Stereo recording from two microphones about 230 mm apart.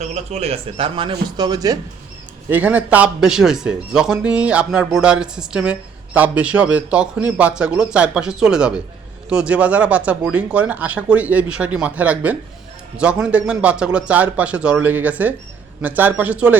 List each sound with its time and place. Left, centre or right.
0.0 s speech: right; by 16.6 s centre